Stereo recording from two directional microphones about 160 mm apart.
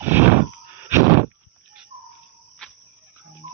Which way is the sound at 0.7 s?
15° right (ahead or behind).